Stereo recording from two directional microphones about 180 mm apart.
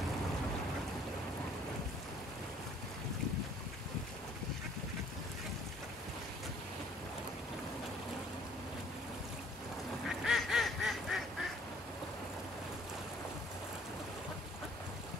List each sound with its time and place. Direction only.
10.0 s duck: centre (ahead or behind)